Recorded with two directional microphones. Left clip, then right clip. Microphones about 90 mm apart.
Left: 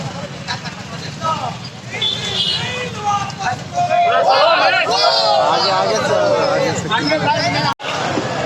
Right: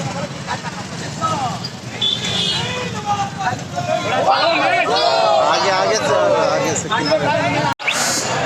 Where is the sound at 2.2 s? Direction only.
30° left (ahead or behind).